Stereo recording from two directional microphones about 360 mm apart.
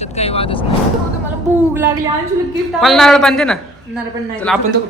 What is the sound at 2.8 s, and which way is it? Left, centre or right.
Speech, centre.